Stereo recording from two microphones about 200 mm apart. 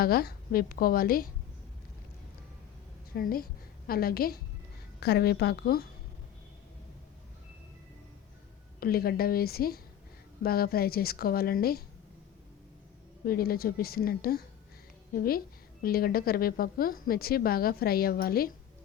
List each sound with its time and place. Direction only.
0.0 s a woman's voice: 50° left (ahead or behind)
3.2 s a woman's voice: 50° left (ahead or behind)
8.8 s a woman's voice: 50° left (ahead or behind)
13.2 s a woman's voice: 50° left (ahead or behind)